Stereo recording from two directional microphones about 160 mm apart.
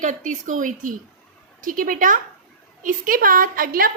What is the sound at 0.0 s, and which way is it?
A woman's voice, 55° right (ahead or behind).